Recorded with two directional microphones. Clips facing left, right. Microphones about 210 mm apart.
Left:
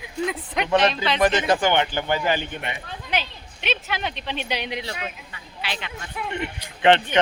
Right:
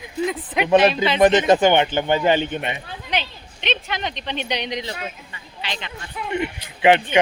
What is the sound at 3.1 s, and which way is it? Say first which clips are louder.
A woman's voice: right 1 dB; 5° left (ahead or behind).